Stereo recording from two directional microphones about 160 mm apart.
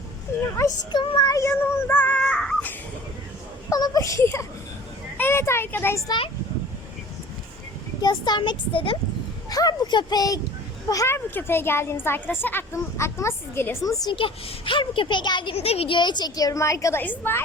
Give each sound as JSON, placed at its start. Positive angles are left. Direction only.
{"t": 0.5, "sound": "speech", "side_deg": 25}
{"t": 3.7, "sound": "speech", "side_deg": 25}
{"t": 8.0, "sound": "a woman's voice", "side_deg": 25}